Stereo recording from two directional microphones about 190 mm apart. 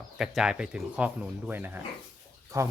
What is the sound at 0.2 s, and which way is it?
Speech, 5° right (ahead or behind).